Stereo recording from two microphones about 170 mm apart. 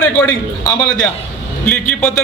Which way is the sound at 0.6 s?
20° left (ahead or behind).